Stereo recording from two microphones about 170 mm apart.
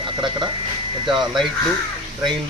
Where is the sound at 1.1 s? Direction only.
Centre (ahead or behind).